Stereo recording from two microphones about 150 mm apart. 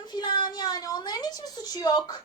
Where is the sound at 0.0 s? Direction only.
30° left (ahead or behind).